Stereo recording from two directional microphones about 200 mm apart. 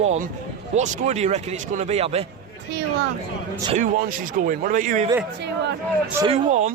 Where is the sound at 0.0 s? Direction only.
35° right (ahead or behind).